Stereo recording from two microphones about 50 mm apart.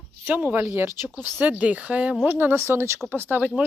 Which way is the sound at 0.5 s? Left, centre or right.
Right.